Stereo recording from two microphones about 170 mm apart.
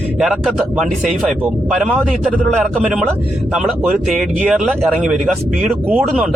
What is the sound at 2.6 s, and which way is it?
Speech, 10° right (ahead or behind).